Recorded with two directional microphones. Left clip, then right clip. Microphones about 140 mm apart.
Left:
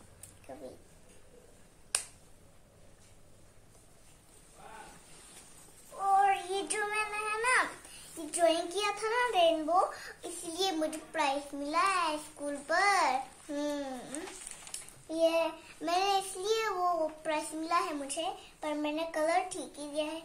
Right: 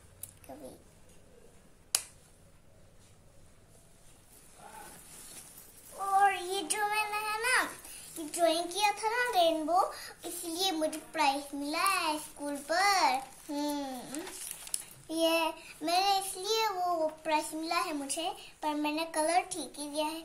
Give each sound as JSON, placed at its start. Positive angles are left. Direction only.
{"t": 0.5, "sound": "squish", "side_deg": 15}
{"t": 6.3, "sound": "child singing", "side_deg": 10}
{"t": 9.3, "sound": "a sound", "side_deg": 5}
{"t": 14.7, "sound": "a sound", "side_deg": 5}
{"t": 15.8, "sound": "child singing", "side_deg": 15}
{"t": 18.4, "sound": "speech", "side_deg": 0}